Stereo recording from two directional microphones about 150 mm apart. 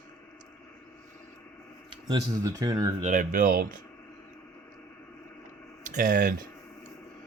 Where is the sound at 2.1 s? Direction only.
25° right (ahead or behind).